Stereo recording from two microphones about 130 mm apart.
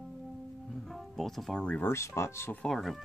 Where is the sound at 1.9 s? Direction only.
20° left (ahead or behind).